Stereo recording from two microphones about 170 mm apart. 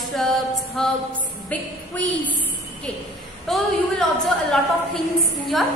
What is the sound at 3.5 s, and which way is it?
A woman's voice, centre (ahead or behind).